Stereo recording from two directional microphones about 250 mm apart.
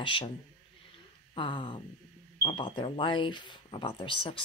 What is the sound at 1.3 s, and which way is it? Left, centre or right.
Speech, centre.